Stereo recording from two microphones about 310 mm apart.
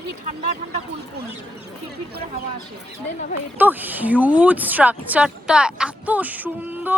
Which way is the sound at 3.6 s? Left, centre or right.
Centre.